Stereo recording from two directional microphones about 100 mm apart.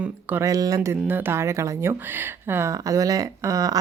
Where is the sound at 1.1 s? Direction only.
25° right (ahead or behind).